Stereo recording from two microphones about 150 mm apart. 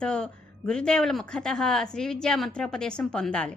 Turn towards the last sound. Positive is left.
turn(degrees=5)  # may be behind; listen again after turning